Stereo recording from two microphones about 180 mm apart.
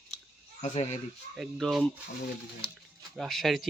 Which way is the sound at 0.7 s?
35° left (ahead or behind).